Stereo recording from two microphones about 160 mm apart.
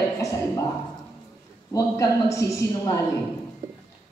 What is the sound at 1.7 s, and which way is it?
A woman's voice, 20° left (ahead or behind).